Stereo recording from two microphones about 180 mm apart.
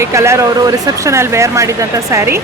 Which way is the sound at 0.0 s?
15° right (ahead or behind).